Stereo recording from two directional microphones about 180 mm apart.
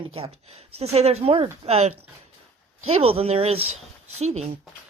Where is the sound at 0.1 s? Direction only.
35° right (ahead or behind).